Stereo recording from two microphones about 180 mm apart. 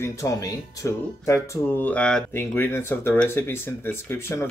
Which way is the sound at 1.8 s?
5° left (ahead or behind).